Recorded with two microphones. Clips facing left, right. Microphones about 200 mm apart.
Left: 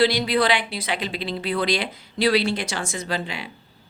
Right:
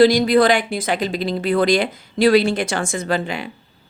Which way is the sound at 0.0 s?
45° right (ahead or behind).